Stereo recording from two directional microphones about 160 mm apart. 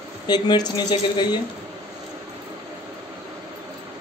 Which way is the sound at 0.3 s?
25° left (ahead or behind).